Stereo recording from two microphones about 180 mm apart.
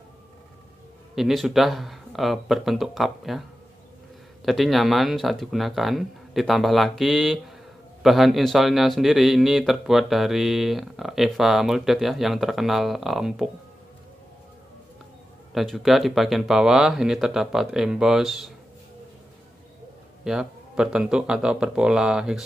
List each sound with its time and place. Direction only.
1.1 s a man's voice: centre (ahead or behind)
15.5 s a man's voice: centre (ahead or behind)
20.2 s a man's voice: 5° right (ahead or behind)